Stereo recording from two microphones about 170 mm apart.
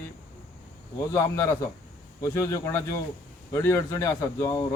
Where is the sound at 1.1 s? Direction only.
20° left (ahead or behind).